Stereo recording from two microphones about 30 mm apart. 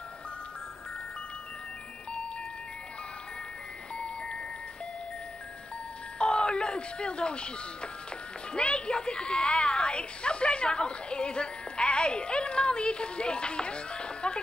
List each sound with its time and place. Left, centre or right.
3.9 s music: left
6.1 s speech: left